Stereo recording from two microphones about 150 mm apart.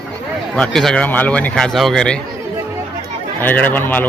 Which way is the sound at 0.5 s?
5° left (ahead or behind).